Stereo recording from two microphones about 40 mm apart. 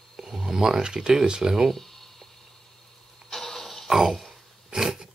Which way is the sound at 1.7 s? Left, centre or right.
Centre.